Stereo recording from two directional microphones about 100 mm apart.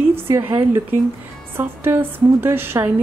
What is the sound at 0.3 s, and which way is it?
A woman's voice, 20° right (ahead or behind).